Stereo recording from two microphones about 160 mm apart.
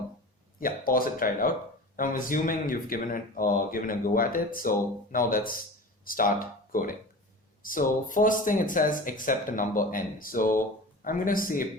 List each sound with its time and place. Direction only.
0.6 s speech: 65° left (ahead or behind)